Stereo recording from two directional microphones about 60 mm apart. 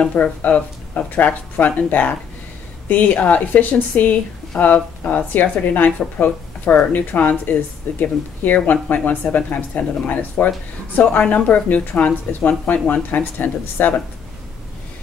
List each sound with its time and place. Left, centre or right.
0.0 s speech: left
5.3 s speech: left